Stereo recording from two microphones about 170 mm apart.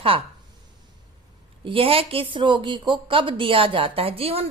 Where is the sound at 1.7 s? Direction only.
35° right (ahead or behind).